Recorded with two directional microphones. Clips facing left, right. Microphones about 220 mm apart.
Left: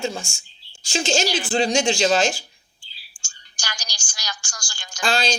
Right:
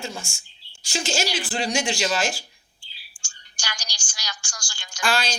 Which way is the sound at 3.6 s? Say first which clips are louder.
Left 1 dB; 45° left (ahead or behind).